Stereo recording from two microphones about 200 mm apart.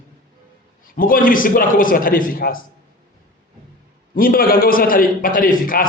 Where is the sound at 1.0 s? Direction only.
45° left (ahead or behind).